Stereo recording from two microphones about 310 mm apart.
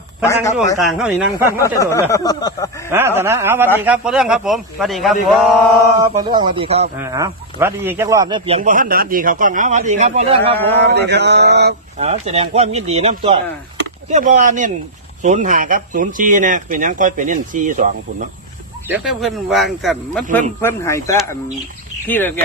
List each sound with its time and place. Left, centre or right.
0.3 s a man's voice: centre
1.6 s speech: centre
2.9 s a man's voice: centre
5.9 s speech: centre
10.9 s mantra: right
12.0 s speech: right
18.9 s a man's voice: centre